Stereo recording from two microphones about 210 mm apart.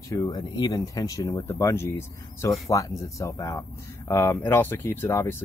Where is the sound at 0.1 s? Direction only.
15° left (ahead or behind).